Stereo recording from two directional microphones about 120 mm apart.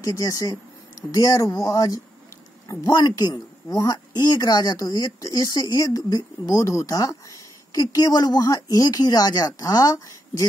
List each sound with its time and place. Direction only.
0.0 s speech: 30° left (ahead or behind)